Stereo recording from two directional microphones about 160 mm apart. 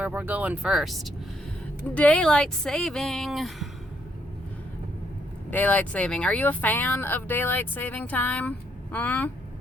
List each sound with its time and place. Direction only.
0.0 s speech: 10° right (ahead or behind)
5.5 s speech: 10° left (ahead or behind)